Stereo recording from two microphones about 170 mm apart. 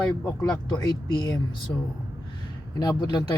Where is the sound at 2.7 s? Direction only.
25° left (ahead or behind).